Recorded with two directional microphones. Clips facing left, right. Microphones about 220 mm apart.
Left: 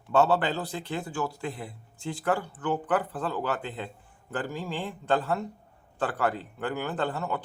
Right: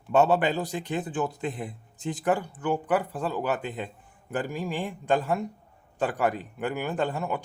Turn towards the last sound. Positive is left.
turn(degrees=-15)  # may be behind; listen again after turning